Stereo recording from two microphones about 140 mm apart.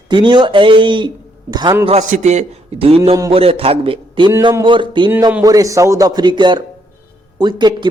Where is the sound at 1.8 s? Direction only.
55° right (ahead or behind).